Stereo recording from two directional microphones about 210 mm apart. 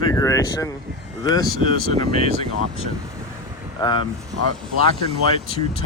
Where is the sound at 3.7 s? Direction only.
20° left (ahead or behind).